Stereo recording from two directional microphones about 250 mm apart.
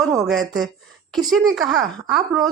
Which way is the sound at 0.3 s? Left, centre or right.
Centre.